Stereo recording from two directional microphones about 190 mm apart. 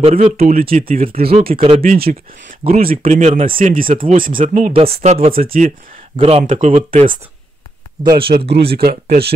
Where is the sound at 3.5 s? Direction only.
45° right (ahead or behind).